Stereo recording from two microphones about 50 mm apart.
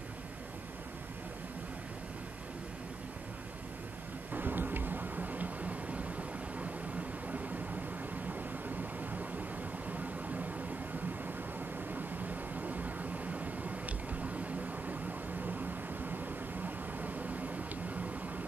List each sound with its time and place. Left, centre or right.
4.3 s a sound: right
8.3 s vehicle: right
11.9 s vehicle: right
16.6 s vehicle: right